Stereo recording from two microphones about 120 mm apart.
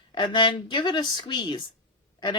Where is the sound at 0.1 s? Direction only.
40° left (ahead or behind).